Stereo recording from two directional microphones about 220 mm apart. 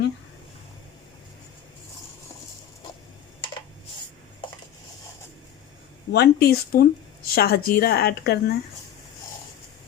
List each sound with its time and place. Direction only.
6.1 s a woman's voice: 45° left (ahead or behind)